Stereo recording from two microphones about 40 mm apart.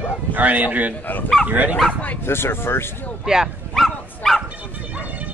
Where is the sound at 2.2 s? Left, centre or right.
Left.